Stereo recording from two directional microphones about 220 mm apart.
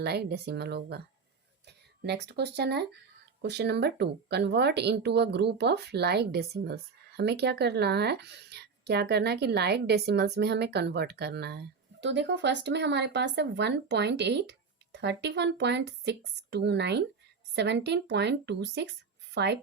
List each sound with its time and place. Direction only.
0.0 s a woman's voice: 45° right (ahead or behind)